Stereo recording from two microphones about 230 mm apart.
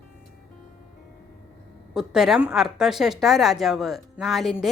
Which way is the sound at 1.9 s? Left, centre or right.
Centre.